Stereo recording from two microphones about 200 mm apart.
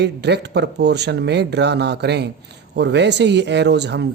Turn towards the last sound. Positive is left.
turn(degrees=-60)  # may be behind; listen again after turning